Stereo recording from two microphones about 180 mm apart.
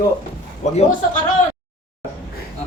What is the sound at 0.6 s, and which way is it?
Speech, 40° left (ahead or behind).